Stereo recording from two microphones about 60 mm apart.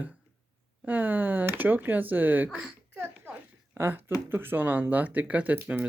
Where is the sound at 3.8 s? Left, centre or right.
Right.